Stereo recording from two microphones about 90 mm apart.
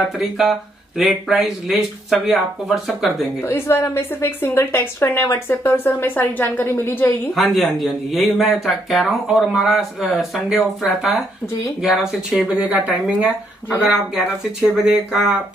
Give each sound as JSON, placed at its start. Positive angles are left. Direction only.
{"t": 0.2, "sound": "speech", "side_deg": 0}
{"t": 3.4, "sound": "a woman's voice", "side_deg": 30}
{"t": 7.3, "sound": "speech", "side_deg": 0}